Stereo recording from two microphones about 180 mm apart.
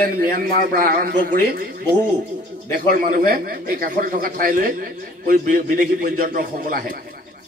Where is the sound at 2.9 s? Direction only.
50° right (ahead or behind).